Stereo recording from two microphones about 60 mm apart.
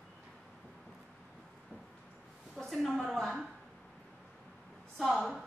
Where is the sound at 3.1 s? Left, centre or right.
Centre.